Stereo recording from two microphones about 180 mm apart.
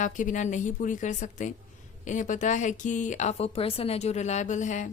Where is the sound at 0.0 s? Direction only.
45° left (ahead or behind).